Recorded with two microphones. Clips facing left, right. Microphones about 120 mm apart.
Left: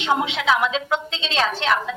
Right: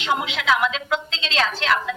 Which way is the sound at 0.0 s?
30° left (ahead or behind).